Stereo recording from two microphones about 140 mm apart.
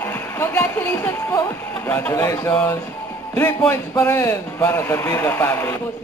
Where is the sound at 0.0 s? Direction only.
15° left (ahead or behind).